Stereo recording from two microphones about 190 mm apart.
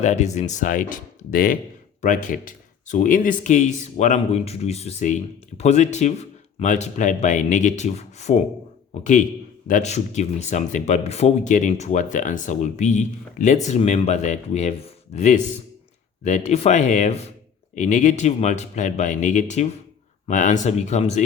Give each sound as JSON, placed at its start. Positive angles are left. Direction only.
{"t": 0.0, "sound": "speech", "side_deg": 40}
{"t": 9.6, "sound": "speech", "side_deg": 40}